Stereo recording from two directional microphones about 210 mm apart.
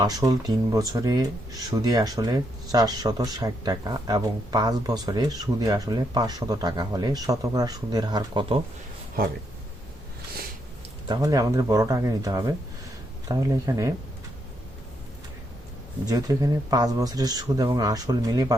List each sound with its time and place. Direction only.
0.0 s speech: 20° right (ahead or behind)
11.1 s speech: 15° right (ahead or behind)
16.0 s speech: 15° right (ahead or behind)